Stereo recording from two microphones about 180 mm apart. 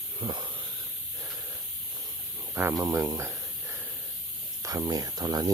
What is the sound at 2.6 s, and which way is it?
Speech, 15° right (ahead or behind).